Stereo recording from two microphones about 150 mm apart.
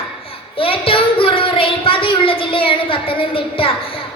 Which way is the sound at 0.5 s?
35° left (ahead or behind).